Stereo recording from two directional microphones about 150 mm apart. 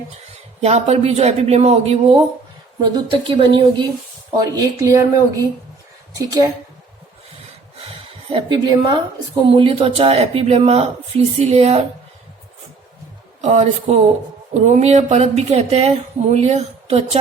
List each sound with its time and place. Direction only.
0.6 s a woman's voice: 45° right (ahead or behind); by 6.5 s 25° right (ahead or behind)
7.8 s a woman's voice: 40° right (ahead or behind)
13.4 s speech: 50° right (ahead or behind)